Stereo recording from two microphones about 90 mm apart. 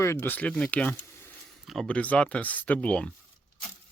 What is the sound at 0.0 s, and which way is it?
Speech, 30° left (ahead or behind).